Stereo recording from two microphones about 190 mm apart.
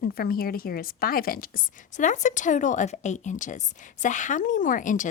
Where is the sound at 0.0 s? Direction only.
50° left (ahead or behind).